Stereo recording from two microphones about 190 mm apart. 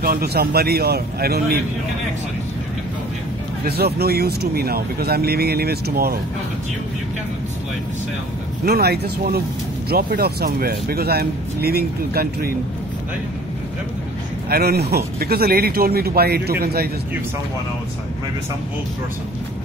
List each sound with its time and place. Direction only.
0.0 s speech: 55° right (ahead or behind)
3.6 s speech: 55° right (ahead or behind)
8.6 s speech: 55° right (ahead or behind)
14.5 s speech: 55° right (ahead or behind)